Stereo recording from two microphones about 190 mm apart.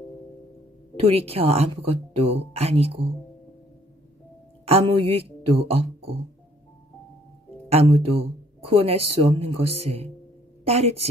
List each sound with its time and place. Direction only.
0.9 s a woman's voice: 30° right (ahead or behind)
4.6 s a woman's voice: 30° right (ahead or behind)
7.7 s a woman's voice: 30° right (ahead or behind)